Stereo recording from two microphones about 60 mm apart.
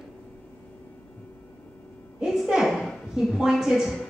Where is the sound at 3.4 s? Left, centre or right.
Centre.